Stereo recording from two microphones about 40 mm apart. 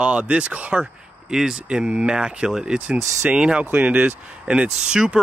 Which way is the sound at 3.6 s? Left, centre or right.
Right.